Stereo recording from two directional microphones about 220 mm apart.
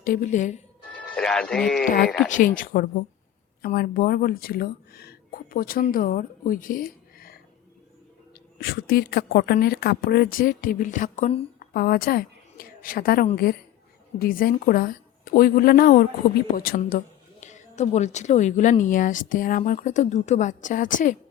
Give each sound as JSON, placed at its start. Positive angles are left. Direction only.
{"t": 0.0, "sound": "a woman's voice", "side_deg": 35}
{"t": 1.1, "sound": "speech", "side_deg": 5}
{"t": 2.6, "sound": "a woman's voice", "side_deg": 45}
{"t": 8.5, "sound": "a woman's voice", "side_deg": 45}